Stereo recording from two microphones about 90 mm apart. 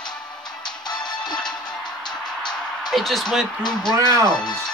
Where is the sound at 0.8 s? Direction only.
50° left (ahead or behind).